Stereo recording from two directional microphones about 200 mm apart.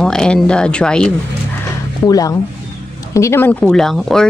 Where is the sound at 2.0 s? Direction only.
15° left (ahead or behind).